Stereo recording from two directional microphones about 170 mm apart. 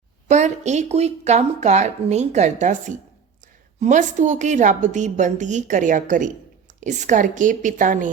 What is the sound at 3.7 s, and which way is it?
Speech, 45° right (ahead or behind).